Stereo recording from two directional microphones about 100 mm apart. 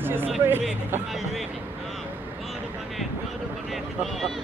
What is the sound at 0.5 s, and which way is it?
Speech, 20° right (ahead or behind).